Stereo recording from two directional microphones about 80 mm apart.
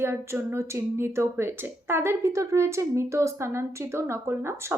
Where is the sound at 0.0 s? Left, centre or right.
Right.